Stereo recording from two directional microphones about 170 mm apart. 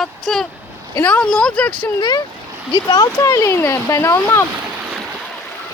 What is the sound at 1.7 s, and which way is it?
Speech, 25° left (ahead or behind).